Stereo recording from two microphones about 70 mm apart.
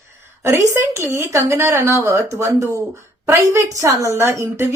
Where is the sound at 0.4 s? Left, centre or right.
Right.